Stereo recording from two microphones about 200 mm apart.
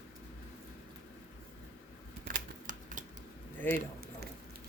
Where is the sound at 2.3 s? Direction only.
40° right (ahead or behind).